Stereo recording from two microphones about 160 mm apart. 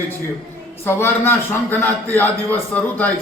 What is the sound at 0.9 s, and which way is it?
A man's voice, 15° left (ahead or behind).